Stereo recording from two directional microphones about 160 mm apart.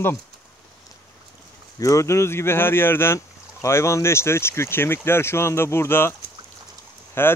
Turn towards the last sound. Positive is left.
turn(degrees=15)  # may be behind; listen again after turning